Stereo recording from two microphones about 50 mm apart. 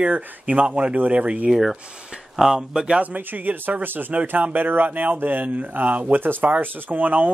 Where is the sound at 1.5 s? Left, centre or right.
Centre.